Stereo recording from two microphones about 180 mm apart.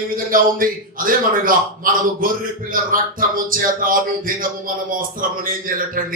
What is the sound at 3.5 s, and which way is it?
A man's voice, 50° right (ahead or behind).